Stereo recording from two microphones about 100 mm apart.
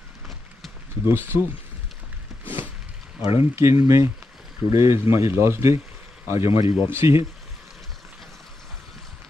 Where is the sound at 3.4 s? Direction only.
25° right (ahead or behind).